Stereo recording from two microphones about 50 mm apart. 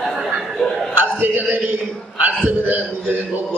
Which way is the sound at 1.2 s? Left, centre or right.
Right.